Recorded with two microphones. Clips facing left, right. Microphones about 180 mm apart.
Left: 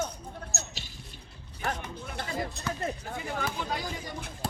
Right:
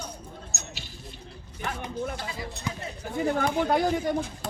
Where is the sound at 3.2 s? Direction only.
55° right (ahead or behind).